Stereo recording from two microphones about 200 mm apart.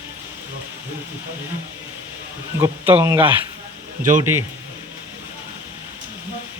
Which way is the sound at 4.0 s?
40° right (ahead or behind).